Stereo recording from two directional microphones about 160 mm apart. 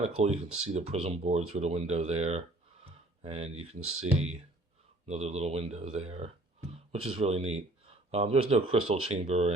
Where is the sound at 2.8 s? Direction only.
40° right (ahead or behind).